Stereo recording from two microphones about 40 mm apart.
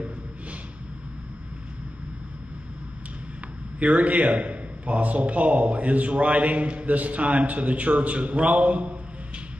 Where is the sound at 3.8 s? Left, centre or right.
Right.